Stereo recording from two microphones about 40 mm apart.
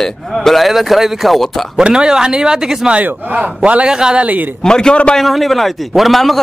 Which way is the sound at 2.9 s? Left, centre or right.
Right.